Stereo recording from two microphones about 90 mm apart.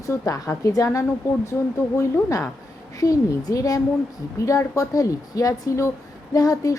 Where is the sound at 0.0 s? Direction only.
40° left (ahead or behind).